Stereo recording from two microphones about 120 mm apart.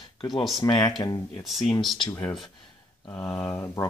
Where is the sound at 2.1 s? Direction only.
25° left (ahead or behind).